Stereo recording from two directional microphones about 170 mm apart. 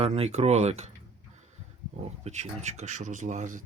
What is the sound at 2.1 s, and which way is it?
Speech, 40° right (ahead or behind).